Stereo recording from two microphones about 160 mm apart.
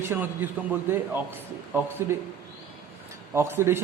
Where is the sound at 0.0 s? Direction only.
15° right (ahead or behind).